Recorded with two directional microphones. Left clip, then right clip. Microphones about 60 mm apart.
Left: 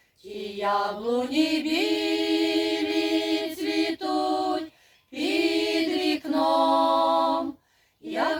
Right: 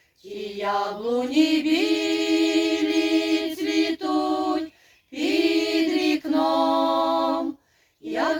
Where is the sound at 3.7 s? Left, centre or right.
Centre.